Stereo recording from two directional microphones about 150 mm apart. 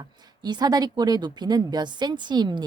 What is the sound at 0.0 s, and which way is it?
A woman's voice, 25° right (ahead or behind).